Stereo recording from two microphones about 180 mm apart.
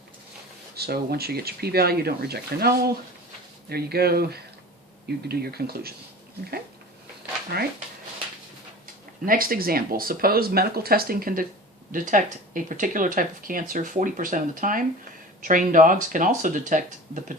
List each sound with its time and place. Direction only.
0.8 s speech: 60° right (ahead or behind)
9.2 s speech: 50° right (ahead or behind)